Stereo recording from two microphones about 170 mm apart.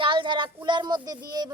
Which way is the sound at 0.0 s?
30° right (ahead or behind).